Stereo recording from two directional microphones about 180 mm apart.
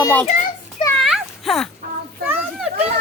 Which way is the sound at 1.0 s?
Centre (ahead or behind).